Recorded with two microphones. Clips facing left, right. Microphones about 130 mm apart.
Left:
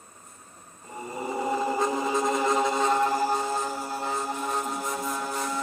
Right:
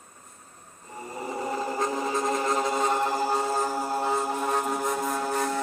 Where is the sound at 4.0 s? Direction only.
45° right (ahead or behind).